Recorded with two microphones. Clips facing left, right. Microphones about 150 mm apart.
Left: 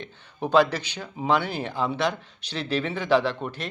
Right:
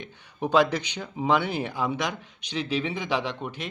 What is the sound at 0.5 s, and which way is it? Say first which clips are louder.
Speech: left 2 dB; 15° right (ahead or behind).